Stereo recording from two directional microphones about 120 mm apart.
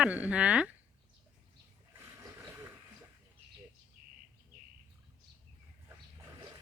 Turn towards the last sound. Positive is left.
turn(degrees=-35)  # may be behind; listen again after turning